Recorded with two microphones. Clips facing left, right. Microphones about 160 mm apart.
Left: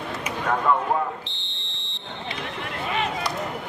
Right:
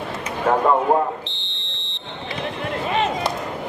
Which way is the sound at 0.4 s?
35° right (ahead or behind).